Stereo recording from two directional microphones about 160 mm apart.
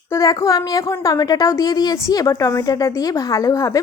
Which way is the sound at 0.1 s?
20° left (ahead or behind).